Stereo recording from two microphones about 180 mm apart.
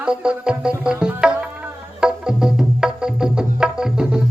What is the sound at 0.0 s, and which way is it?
Music, 5° right (ahead or behind).